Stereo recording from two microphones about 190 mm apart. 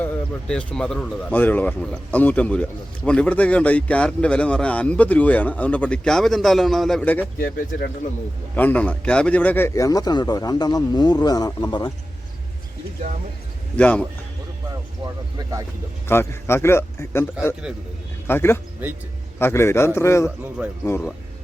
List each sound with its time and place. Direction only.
0.0 s speech: 5° left (ahead or behind)
7.3 s speech: 55° left (ahead or behind)
8.5 s a man's voice: 10° left (ahead or behind)
13.7 s speech: 5° left (ahead or behind)
16.0 s speech: 15° left (ahead or behind)
18.3 s speech: 10° left (ahead or behind)
18.8 s speech: 10° right (ahead or behind)
19.4 s speech: 15° left (ahead or behind)
20.6 s speech: 5° right (ahead or behind)